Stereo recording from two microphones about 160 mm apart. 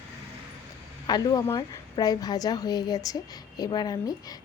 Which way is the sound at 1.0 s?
25° left (ahead or behind).